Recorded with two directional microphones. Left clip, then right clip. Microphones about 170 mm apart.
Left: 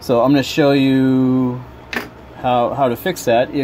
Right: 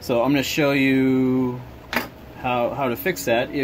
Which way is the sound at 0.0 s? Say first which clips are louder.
Left 6 dB; 30° left (ahead or behind).